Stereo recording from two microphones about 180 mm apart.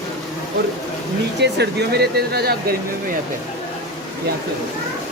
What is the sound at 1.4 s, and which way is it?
Speech, 70° right (ahead or behind).